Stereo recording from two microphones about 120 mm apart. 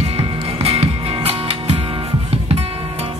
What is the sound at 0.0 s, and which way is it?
Music, 55° right (ahead or behind).